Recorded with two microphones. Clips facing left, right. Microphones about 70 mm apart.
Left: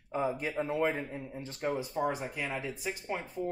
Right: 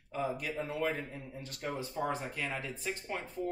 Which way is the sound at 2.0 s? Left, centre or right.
Centre.